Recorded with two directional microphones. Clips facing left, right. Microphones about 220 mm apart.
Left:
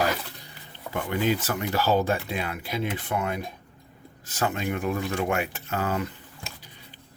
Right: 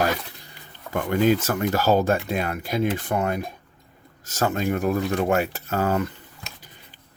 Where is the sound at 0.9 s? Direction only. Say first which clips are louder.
Right 6 dB; 45° right (ahead or behind).